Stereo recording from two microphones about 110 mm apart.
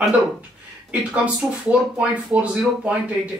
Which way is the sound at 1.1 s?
10° right (ahead or behind).